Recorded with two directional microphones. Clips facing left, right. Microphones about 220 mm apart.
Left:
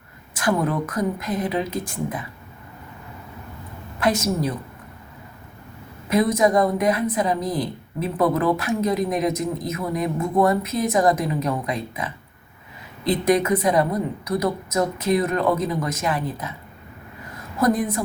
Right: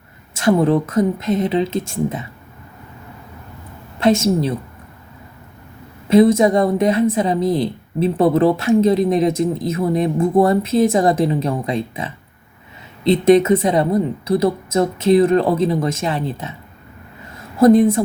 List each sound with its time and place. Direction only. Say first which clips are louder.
0.3 s a woman's voice: right 7 dB; 25° right (ahead or behind)
4.0 s a woman's voice: right 6 dB; 25° right (ahead or behind)
6.1 s a woman's voice: right 7 dB; 25° right (ahead or behind)
17.6 s a woman's voice: right 10 dB; 25° right (ahead or behind)